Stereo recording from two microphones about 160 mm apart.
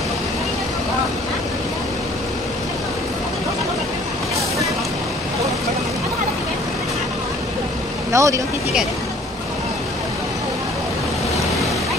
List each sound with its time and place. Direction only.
8.1 s speech: 20° right (ahead or behind)